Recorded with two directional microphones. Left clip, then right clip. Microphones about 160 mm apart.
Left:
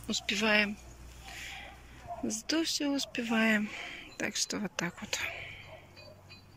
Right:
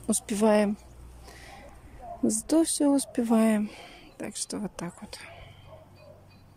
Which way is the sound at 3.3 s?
25° right (ahead or behind).